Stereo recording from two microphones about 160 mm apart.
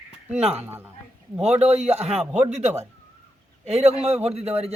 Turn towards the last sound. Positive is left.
turn(degrees=-40)  # may be behind; listen again after turning